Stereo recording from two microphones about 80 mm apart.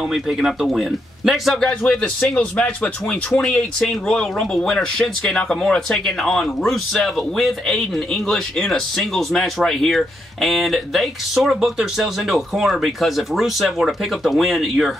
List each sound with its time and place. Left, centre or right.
0.1 s speech: centre